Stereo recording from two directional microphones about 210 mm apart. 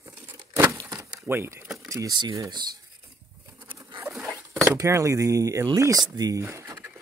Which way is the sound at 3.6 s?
20° right (ahead or behind).